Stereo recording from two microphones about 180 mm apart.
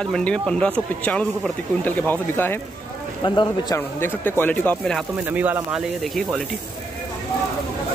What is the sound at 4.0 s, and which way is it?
Speech, 10° left (ahead or behind).